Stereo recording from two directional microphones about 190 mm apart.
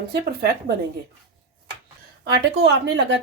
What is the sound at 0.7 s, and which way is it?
Speech, 35° right (ahead or behind).